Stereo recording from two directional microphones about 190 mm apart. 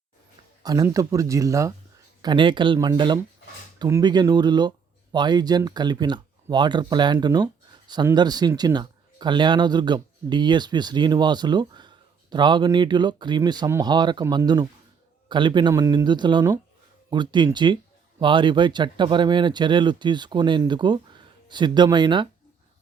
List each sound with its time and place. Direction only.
0.6 s speech: 20° right (ahead or behind)